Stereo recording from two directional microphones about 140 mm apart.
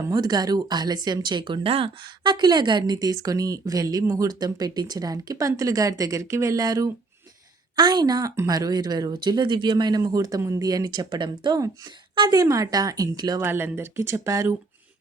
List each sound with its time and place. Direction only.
0.0 s speech: 25° right (ahead or behind)
13.4 s speech: 15° right (ahead or behind)